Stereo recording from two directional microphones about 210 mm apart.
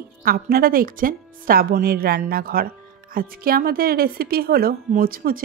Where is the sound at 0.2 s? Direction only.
45° right (ahead or behind).